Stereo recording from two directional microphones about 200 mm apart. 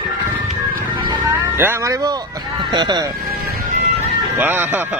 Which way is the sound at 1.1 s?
10° right (ahead or behind).